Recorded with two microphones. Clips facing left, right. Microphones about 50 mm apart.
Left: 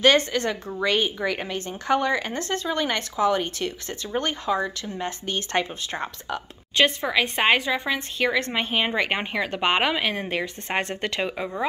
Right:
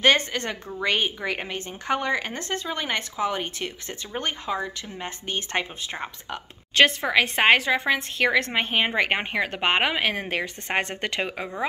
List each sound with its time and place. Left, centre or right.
0.0 s speech: right
7.0 s a woman's voice: right
8.5 s a woman's voice: right
10.0 s a woman's voice: right
11.1 s speech: right